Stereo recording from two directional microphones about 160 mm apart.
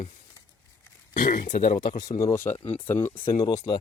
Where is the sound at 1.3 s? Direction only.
55° left (ahead or behind).